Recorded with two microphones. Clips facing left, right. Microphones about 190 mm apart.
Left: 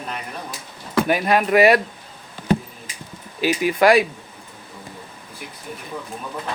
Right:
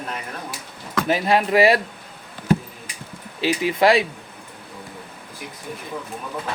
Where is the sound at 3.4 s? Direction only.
25° right (ahead or behind).